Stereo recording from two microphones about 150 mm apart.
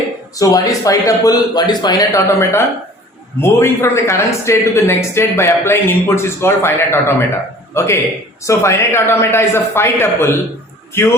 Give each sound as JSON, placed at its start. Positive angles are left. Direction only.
{"t": 0.3, "sound": "a man's voice", "side_deg": 25}